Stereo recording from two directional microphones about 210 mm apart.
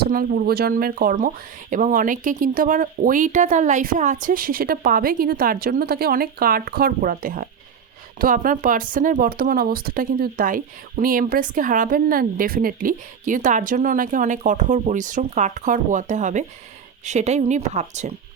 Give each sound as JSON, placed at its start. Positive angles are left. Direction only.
{"t": 0.0, "sound": "speech", "side_deg": -45}